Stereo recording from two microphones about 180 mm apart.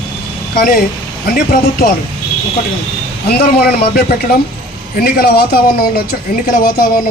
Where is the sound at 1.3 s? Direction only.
45° left (ahead or behind).